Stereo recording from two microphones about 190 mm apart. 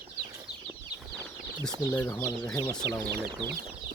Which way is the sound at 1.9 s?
15° left (ahead or behind).